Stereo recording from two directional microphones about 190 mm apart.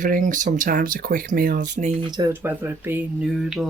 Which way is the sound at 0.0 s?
45° right (ahead or behind).